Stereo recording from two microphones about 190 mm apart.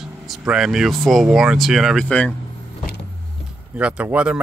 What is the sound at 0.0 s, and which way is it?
Speech, centre (ahead or behind).